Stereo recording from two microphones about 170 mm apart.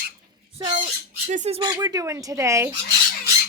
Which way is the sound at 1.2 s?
45° right (ahead or behind).